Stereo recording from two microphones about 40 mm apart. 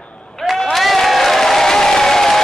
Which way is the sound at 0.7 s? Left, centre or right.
Centre.